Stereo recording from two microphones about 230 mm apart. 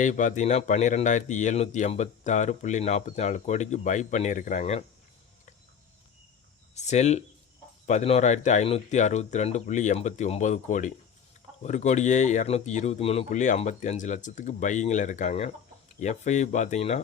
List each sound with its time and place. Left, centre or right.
0.0 s speech: left
6.7 s speech: left